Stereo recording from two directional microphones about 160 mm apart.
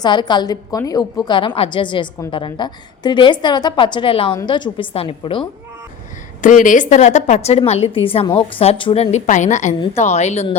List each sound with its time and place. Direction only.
0.0 s a woman's voice: 30° left (ahead or behind)
6.4 s a woman's voice: 55° left (ahead or behind)